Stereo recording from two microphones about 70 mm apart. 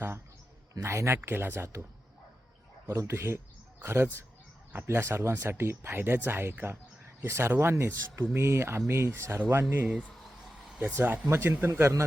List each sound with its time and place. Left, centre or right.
0.8 s speech: right
2.8 s speech: right
10.9 s speech: right